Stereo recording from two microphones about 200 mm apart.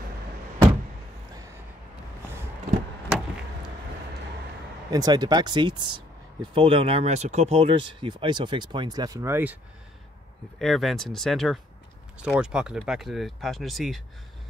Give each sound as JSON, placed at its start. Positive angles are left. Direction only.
{"t": 4.9, "sound": "speech", "side_deg": -20}
{"t": 10.6, "sound": "speech", "side_deg": 0}